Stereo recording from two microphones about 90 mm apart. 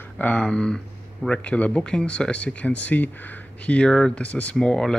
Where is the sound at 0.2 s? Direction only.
15° left (ahead or behind).